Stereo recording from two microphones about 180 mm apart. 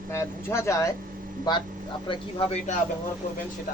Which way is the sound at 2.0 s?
35° left (ahead or behind).